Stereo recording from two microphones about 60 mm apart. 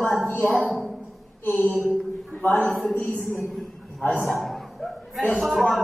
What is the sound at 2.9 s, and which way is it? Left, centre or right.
Speech, centre.